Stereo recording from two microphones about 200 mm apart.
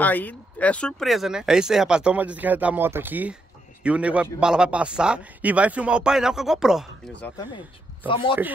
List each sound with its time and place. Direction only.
0.0 s a man's voice: 10° left (ahead or behind)
8.1 s speech: 25° left (ahead or behind)